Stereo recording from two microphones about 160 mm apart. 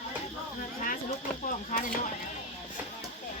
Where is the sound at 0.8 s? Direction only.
50° left (ahead or behind).